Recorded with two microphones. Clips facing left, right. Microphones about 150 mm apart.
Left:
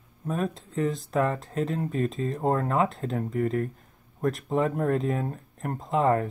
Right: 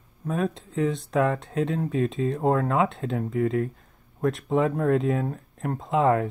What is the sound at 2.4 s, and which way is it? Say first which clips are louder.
Speech: right 2 dB; 40° left (ahead or behind).